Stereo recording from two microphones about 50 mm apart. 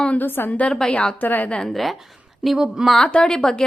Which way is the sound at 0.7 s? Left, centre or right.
Centre.